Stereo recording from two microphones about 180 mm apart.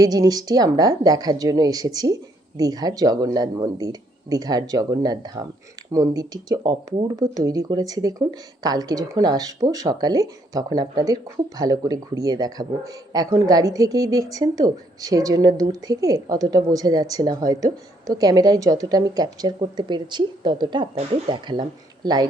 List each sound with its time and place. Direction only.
0.0 s speech: 20° right (ahead or behind)